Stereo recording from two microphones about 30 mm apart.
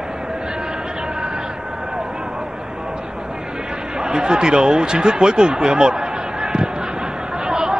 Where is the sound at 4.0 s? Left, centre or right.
Right.